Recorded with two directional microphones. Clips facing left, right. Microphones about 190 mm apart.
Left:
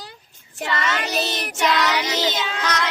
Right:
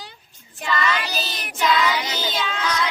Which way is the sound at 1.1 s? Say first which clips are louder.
Left 6 dB; 70° left (ahead or behind).